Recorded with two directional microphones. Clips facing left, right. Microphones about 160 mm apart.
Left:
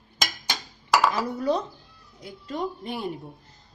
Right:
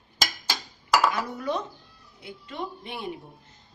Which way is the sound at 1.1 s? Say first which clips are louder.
Left 4 dB; 35° left (ahead or behind).